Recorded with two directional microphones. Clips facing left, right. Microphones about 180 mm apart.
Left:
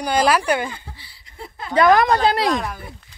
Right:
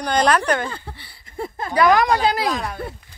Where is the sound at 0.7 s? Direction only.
60° right (ahead or behind).